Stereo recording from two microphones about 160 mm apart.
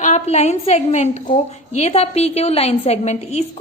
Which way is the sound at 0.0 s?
45° left (ahead or behind).